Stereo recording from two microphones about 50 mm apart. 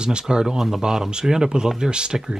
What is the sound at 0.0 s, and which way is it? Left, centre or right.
Speech, centre.